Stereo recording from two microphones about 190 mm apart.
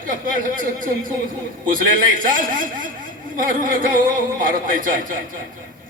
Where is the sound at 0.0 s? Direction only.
45° right (ahead or behind).